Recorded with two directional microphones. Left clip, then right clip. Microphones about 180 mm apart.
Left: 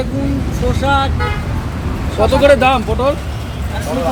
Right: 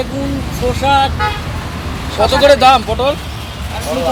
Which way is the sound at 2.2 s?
5° left (ahead or behind).